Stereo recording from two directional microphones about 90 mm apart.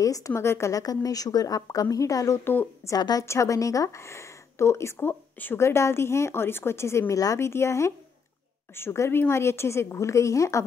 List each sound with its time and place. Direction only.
0.0 s a woman's voice: 40° left (ahead or behind); by 2.7 s 25° left (ahead or behind)
3.0 s a woman's voice: 45° left (ahead or behind)
3.3 s a woman's voice: 35° left (ahead or behind)